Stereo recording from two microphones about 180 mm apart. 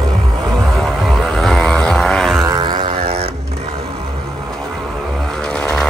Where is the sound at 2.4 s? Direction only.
20° right (ahead or behind).